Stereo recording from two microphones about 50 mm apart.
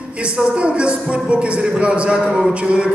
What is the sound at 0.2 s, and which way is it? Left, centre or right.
A woman's voice, right.